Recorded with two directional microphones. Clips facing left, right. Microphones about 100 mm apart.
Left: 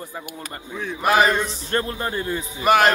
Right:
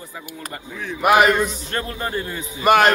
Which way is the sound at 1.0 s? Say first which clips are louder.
Right 3 dB; 5° right (ahead or behind).